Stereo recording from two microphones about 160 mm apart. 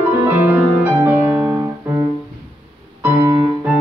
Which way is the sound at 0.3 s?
10° right (ahead or behind).